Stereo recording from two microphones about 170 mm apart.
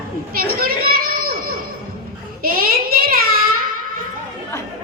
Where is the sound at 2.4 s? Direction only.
60° right (ahead or behind).